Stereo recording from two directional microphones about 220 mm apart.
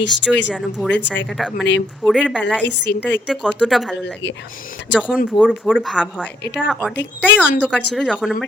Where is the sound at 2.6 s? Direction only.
50° left (ahead or behind).